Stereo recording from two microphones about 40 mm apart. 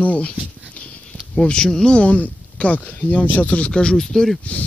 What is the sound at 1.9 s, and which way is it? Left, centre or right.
Speech, left.